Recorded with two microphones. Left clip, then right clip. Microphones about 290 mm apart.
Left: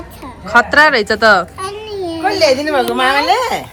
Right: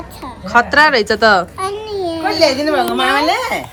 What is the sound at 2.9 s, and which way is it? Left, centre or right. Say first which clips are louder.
Speech: left 2 dB; left.